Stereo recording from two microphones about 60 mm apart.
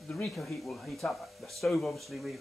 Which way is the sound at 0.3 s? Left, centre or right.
Centre.